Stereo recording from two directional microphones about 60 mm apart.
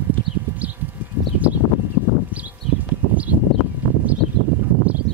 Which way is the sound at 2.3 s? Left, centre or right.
Right.